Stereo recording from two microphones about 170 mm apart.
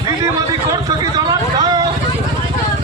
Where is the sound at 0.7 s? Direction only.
20° right (ahead or behind).